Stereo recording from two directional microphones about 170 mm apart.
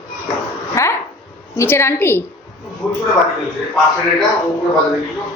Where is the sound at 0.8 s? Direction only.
20° left (ahead or behind).